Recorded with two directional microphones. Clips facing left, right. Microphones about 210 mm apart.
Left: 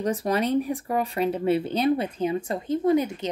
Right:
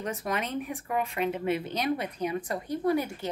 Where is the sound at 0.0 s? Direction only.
35° left (ahead or behind).